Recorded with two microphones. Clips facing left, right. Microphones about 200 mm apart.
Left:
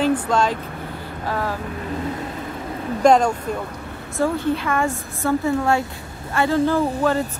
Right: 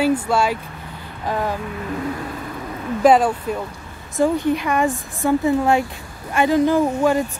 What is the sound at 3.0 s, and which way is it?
Speech, 5° right (ahead or behind).